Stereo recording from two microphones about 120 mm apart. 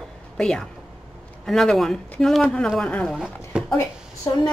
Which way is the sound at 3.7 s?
25° left (ahead or behind).